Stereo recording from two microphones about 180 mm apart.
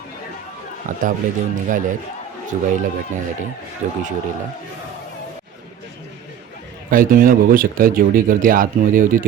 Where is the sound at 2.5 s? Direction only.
40° right (ahead or behind).